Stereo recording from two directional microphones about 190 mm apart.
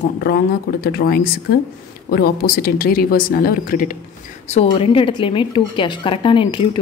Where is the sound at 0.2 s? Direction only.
55° left (ahead or behind).